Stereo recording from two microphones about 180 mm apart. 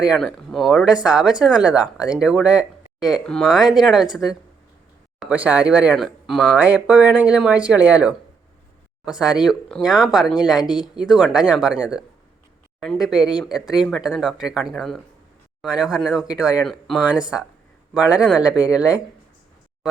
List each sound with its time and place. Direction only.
0.0 s speech: centre (ahead or behind)